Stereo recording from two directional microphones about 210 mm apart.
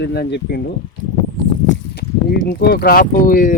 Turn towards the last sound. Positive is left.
turn(degrees=40)  # may be behind; listen again after turning